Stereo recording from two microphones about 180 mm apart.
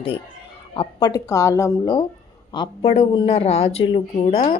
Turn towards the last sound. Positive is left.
turn(degrees=30)  # may be behind; listen again after turning